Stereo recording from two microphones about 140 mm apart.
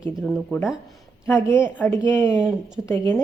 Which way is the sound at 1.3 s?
15° left (ahead or behind).